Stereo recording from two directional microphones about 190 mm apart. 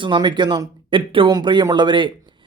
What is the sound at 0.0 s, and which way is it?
Speech, 25° right (ahead or behind).